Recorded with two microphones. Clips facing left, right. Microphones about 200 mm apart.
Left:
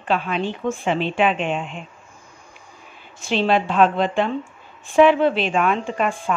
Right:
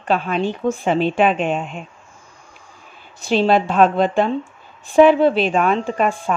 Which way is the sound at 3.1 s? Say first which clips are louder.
Right 4 dB; 40° right (ahead or behind).